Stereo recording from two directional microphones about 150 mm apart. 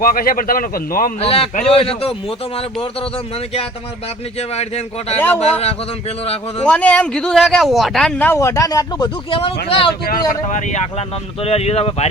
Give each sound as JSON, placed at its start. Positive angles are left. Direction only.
{"t": 0.0, "sound": "a man's voice", "side_deg": 70}
{"t": 1.2, "sound": "a man's voice", "side_deg": 40}
{"t": 4.4, "sound": "speech", "side_deg": 45}
{"t": 5.1, "sound": "speech", "side_deg": 10}
{"t": 5.4, "sound": "a man's voice", "side_deg": 45}
{"t": 6.7, "sound": "speech", "side_deg": 10}
{"t": 8.4, "sound": "speech", "side_deg": 20}
{"t": 9.6, "sound": "a man's voice", "side_deg": 35}
{"t": 10.1, "sound": "a man's voice", "side_deg": 75}
{"t": 10.7, "sound": "speech", "side_deg": 50}